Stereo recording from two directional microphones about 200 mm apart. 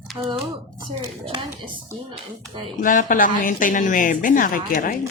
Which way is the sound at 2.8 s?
40° left (ahead or behind).